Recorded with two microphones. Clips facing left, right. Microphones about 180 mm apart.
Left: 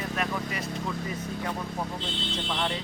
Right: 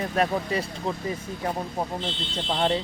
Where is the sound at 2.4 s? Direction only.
35° right (ahead or behind).